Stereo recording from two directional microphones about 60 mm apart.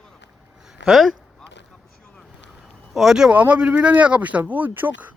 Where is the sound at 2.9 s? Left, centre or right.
Centre.